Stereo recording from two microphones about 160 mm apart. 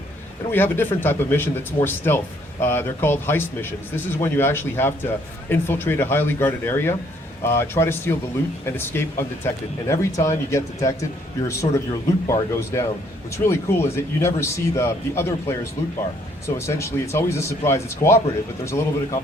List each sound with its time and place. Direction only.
0.5 s speech: 15° left (ahead or behind)
16.6 s speech: 15° left (ahead or behind)